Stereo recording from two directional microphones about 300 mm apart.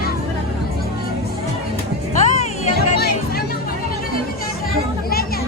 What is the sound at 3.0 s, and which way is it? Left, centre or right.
Music, left.